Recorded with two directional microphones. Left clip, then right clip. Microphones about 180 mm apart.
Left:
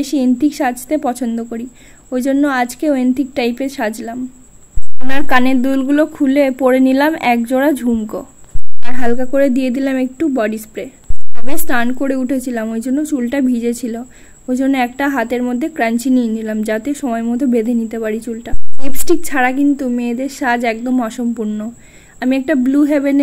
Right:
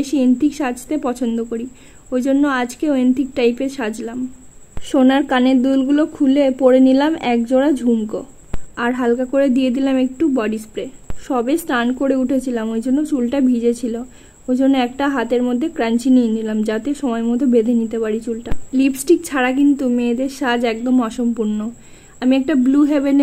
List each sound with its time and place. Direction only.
0.0 s a woman's voice: 15° left (ahead or behind)